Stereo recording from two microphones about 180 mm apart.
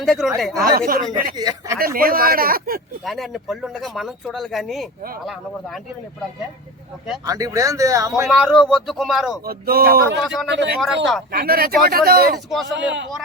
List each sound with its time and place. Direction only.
0.0 s speech: centre (ahead or behind)
0.6 s speech: 55° right (ahead or behind)
1.4 s speech: 20° right (ahead or behind)
1.8 s speech: 55° right (ahead or behind)
3.0 s speech: centre (ahead or behind)
7.3 s speech: 20° right (ahead or behind)
8.3 s speech: centre (ahead or behind)
9.5 s speech: 55° right (ahead or behind)
10.2 s speech: centre (ahead or behind)
10.5 s speech: 75° right (ahead or behind)
10.8 s speech: centre (ahead or behind)
11.3 s speech: 55° right (ahead or behind)
12.7 s speech: 85° right